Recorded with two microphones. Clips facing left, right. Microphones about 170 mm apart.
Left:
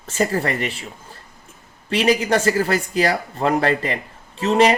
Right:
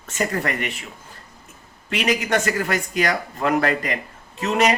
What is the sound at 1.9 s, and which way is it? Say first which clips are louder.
Speech: left 4 dB; 30° left (ahead or behind).